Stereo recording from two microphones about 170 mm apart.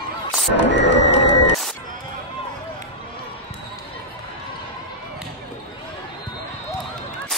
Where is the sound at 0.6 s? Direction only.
90° left.